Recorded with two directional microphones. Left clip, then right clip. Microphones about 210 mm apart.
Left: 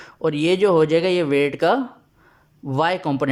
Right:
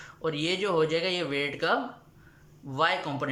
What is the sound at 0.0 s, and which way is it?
Speech, 40° left (ahead or behind).